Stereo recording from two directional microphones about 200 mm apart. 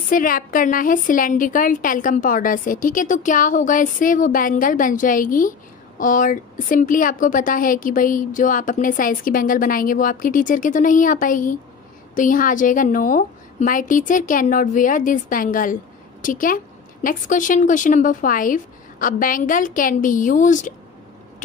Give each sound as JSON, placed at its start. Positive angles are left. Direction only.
{"t": 0.1, "sound": "a woman's voice", "side_deg": 45}